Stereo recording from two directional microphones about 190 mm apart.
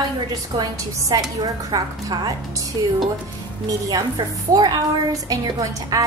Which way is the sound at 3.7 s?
20° right (ahead or behind).